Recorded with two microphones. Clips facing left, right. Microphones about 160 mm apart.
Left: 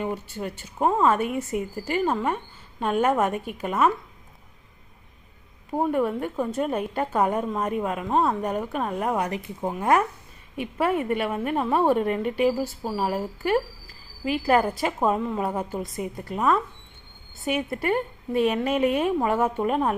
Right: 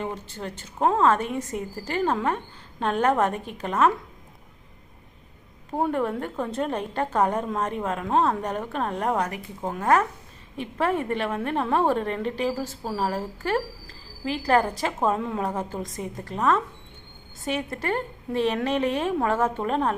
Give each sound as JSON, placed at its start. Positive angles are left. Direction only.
{"t": 0.0, "sound": "a woman's voice", "side_deg": 10}
{"t": 5.7, "sound": "a woman's voice", "side_deg": 5}